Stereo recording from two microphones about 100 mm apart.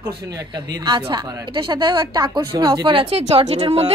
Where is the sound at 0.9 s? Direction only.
50° right (ahead or behind).